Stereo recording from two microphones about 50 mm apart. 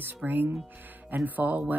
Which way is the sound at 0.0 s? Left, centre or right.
Right.